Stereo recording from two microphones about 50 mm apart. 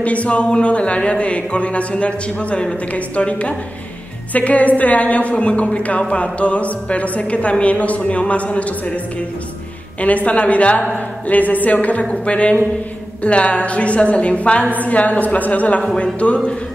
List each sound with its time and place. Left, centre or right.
0.0 s a woman's voice: left